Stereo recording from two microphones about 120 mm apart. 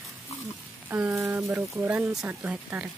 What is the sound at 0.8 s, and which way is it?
Speech, 10° right (ahead or behind).